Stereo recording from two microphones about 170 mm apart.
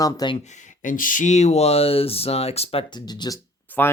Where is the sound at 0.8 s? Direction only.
50° left (ahead or behind); by 3.3 s 25° left (ahead or behind).